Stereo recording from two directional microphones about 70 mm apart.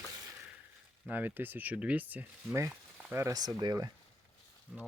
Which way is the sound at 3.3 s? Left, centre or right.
Right.